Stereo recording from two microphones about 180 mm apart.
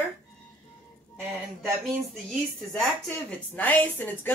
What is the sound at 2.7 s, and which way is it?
A woman's voice, 5° left (ahead or behind).